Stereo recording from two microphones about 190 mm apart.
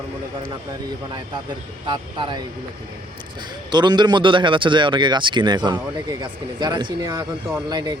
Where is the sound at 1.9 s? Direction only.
25° right (ahead or behind).